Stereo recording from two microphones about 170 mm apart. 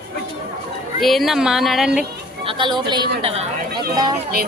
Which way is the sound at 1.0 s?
Centre (ahead or behind).